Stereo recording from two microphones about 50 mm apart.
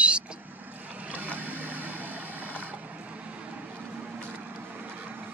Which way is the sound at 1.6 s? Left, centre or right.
Right.